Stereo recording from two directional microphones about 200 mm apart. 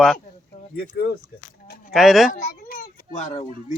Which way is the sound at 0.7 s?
50° left (ahead or behind).